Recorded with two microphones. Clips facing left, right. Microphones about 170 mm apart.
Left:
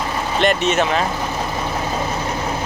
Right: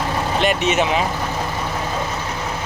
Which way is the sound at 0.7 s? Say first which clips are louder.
Even; 15° right (ahead or behind).